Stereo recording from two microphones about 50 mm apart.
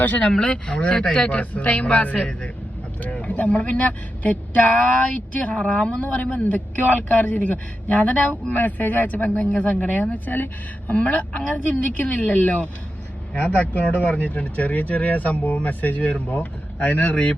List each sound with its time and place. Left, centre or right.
0.0 s speech: left
0.3 s speech: centre
8.3 s speech: left